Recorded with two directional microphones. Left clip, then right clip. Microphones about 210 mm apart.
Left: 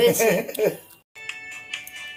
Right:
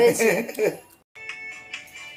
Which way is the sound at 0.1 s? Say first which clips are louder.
Left 1 dB; 10° left (ahead or behind).